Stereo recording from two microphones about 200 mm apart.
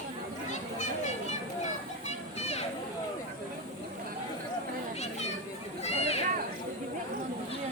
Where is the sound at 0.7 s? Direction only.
35° left (ahead or behind).